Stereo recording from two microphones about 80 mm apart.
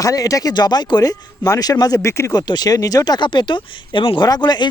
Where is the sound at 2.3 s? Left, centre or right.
Left.